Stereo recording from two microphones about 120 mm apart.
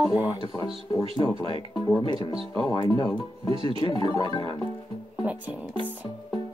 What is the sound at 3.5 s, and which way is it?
Speech, 50° right (ahead or behind).